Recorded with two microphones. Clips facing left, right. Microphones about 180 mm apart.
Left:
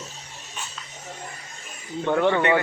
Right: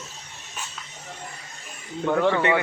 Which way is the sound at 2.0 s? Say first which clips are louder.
Even; centre (ahead or behind).